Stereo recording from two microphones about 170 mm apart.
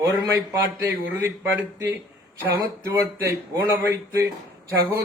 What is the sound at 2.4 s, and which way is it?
Speech, 15° right (ahead or behind).